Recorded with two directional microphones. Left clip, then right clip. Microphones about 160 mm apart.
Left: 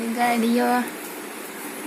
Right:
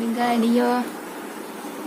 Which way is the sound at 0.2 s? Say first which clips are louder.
Even; centre (ahead or behind).